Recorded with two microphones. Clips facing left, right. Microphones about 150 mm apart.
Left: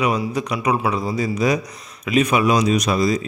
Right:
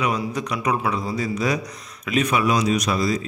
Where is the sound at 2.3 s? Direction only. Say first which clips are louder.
Left 2 dB; 20° left (ahead or behind).